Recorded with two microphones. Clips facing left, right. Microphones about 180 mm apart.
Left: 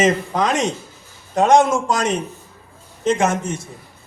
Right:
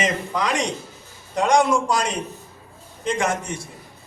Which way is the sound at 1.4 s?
20° left (ahead or behind).